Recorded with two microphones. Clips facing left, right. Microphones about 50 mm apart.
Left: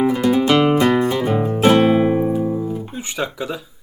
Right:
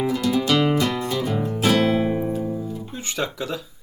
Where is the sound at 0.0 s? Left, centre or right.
Left.